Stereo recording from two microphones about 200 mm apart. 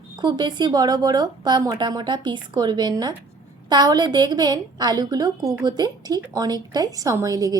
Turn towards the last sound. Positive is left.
turn(degrees=-20)  # may be behind; listen again after turning